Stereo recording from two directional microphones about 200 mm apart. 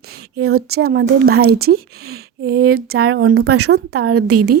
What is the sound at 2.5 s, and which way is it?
Speech, 50° right (ahead or behind).